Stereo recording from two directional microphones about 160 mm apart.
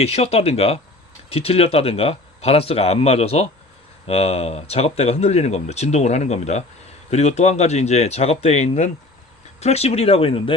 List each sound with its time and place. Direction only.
0.0 s speech: 40° left (ahead or behind)